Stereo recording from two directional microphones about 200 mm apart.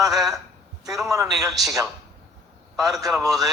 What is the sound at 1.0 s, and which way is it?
Speech, 15° right (ahead or behind).